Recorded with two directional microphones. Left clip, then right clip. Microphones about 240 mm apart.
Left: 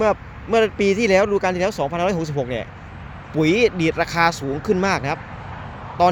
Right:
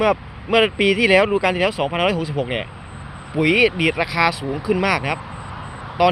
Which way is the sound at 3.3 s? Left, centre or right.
Centre.